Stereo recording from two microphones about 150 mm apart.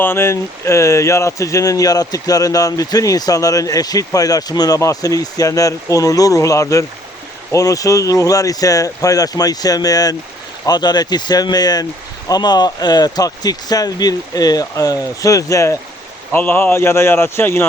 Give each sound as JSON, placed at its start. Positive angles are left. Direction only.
{"t": 0.0, "sound": "a man's voice", "side_deg": 15}